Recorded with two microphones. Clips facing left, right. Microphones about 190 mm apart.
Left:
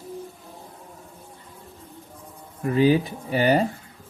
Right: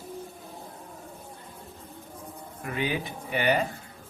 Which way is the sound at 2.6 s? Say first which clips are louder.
Left 11 dB; 40° left (ahead or behind).